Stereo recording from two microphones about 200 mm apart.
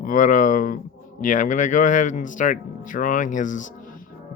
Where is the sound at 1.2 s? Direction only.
40° left (ahead or behind).